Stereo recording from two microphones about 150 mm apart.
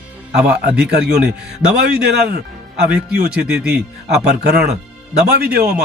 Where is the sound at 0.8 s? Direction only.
90° right.